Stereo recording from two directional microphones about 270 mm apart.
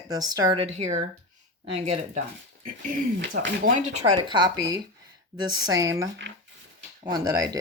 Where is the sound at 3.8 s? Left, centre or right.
Right.